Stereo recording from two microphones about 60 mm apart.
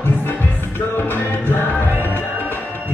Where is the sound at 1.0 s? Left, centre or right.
Left.